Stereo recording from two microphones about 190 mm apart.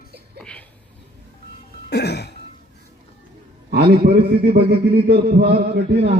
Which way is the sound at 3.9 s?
50° right (ahead or behind).